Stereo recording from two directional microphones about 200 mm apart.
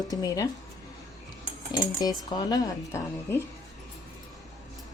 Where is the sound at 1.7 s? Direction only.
20° left (ahead or behind).